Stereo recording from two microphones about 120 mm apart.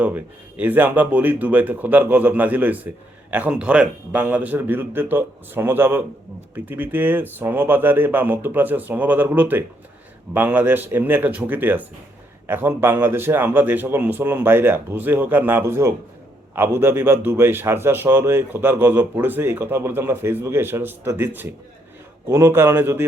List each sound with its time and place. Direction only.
0.0 s a man's voice: 15° right (ahead or behind)